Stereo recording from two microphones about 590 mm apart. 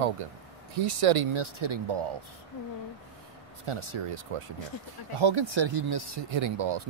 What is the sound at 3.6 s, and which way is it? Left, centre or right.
Speech, right.